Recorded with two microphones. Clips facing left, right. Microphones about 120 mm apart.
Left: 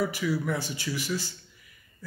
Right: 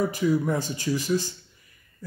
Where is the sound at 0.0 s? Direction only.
40° right (ahead or behind).